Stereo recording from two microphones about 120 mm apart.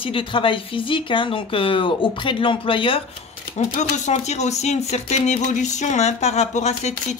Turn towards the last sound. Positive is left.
turn(degrees=70)  # may be behind; listen again after turning